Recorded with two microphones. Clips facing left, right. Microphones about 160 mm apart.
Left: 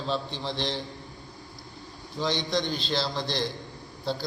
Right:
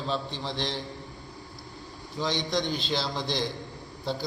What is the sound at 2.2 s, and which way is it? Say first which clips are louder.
A man's voice: left 1 dB; 10° right (ahead or behind).